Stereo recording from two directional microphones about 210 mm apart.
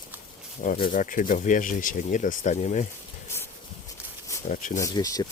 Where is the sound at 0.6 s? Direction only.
40° left (ahead or behind).